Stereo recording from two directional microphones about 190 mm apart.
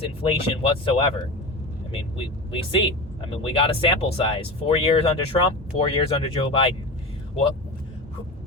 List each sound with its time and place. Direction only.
0.0 s speech: 30° left (ahead or behind)